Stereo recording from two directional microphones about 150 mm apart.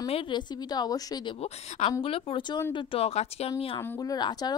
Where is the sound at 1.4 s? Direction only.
50° left (ahead or behind).